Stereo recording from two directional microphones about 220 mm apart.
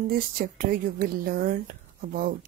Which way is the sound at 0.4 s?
40° right (ahead or behind).